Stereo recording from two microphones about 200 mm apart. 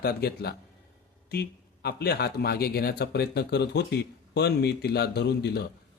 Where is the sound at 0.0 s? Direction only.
50° left (ahead or behind).